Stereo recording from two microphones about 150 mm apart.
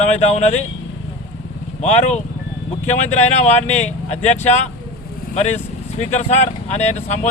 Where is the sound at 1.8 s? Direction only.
45° left (ahead or behind).